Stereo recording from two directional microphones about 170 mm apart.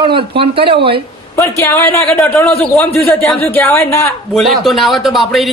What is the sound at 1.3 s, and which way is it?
Speech, 15° left (ahead or behind).